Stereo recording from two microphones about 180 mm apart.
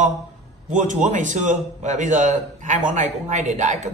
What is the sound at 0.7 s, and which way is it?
A man's voice, 45° right (ahead or behind).